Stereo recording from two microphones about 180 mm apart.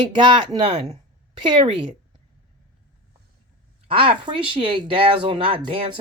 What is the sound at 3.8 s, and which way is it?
Speech, 30° right (ahead or behind).